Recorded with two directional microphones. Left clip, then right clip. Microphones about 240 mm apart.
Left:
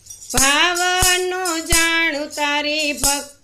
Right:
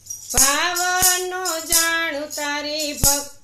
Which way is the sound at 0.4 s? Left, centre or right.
Left.